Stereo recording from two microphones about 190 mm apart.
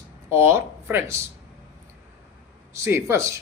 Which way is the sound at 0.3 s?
15° right (ahead or behind).